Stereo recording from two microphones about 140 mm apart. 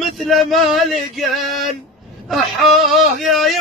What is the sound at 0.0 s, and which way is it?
A man's voice, centre (ahead or behind).